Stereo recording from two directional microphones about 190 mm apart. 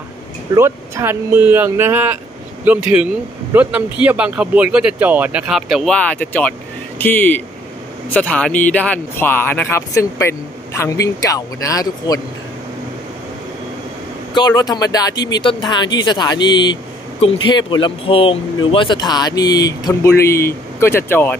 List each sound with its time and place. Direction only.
0.6 s a man's voice: 15° right (ahead or behind); by 12.2 s 20° left (ahead or behind)
14.3 s speech: 20° left (ahead or behind)